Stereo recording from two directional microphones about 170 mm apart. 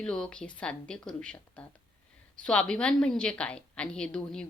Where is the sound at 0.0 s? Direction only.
5° left (ahead or behind).